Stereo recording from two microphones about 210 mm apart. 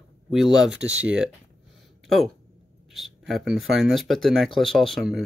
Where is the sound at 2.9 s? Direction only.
Centre (ahead or behind).